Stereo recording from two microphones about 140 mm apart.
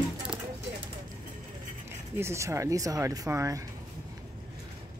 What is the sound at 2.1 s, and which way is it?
Speech, 20° right (ahead or behind).